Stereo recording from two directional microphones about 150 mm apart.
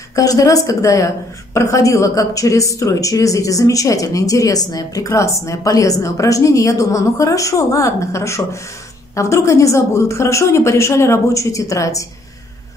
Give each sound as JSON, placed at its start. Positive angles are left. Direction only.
{"t": 0.1, "sound": "a woman's voice", "side_deg": 25}